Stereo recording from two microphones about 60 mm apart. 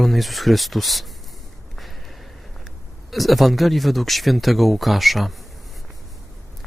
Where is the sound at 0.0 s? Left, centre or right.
Centre.